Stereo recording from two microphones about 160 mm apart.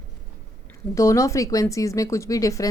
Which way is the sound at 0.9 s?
20° left (ahead or behind).